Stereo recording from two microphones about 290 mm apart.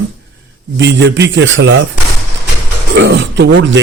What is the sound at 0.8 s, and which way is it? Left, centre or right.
Speech, right.